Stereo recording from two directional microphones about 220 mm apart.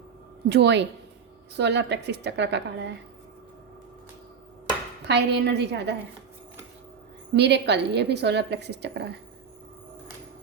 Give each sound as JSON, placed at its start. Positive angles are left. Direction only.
{"t": 0.4, "sound": "a woman's voice", "side_deg": -50}
{"t": 5.0, "sound": "a woman's voice", "side_deg": -50}
{"t": 7.3, "sound": "a woman's voice", "side_deg": -50}